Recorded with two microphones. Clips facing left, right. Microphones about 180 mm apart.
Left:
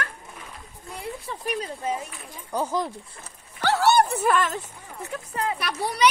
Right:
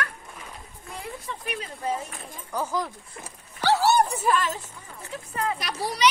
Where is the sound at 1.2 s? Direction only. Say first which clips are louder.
Left 6 dB; 40° left (ahead or behind).